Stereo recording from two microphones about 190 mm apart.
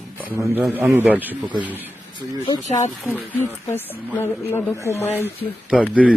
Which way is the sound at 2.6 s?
40° left (ahead or behind).